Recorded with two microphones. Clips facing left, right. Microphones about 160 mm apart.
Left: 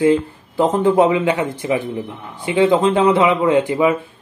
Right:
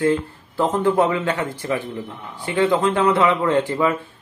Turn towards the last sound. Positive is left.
turn(degrees=15)  # may be behind; listen again after turning